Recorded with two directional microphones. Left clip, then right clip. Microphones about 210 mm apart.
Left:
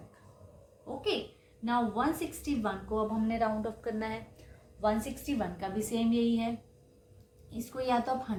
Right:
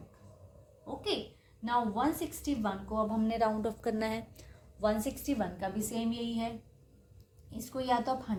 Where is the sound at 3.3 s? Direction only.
45° right (ahead or behind).